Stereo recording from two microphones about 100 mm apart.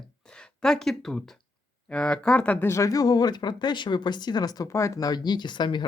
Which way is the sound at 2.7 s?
30° left (ahead or behind).